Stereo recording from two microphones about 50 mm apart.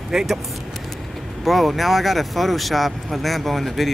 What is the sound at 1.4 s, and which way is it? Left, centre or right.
Speech, centre.